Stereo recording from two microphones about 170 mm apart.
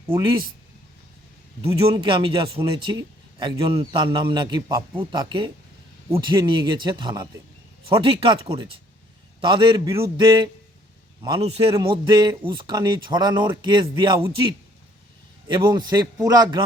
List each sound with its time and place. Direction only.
0.2 s speech: 30° right (ahead or behind)
1.6 s a man's voice: 30° right (ahead or behind)
15.4 s speech: 25° right (ahead or behind)